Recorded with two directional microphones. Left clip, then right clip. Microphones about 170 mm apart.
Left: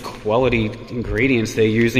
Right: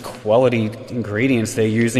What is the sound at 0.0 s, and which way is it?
Speech, 20° right (ahead or behind).